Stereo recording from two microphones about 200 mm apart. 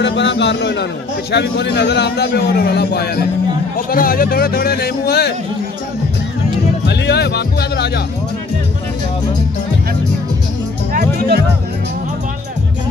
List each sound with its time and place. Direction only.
0.0 s a man's voice: 60° left (ahead or behind)
6.9 s speech: 55° left (ahead or behind)
10.9 s speech: 50° right (ahead or behind)